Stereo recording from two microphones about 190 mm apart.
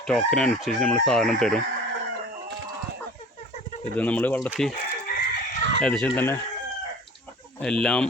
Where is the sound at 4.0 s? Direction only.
10° left (ahead or behind).